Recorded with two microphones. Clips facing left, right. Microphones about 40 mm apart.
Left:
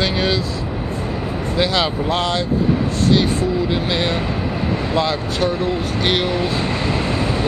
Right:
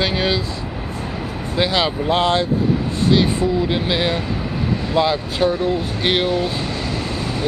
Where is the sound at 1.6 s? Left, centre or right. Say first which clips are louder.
Even; centre.